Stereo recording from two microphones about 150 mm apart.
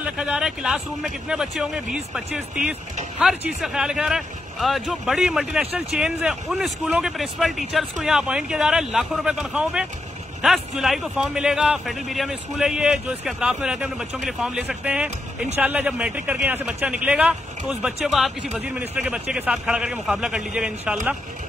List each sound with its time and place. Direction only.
0.0 s a man's voice: 5° right (ahead or behind)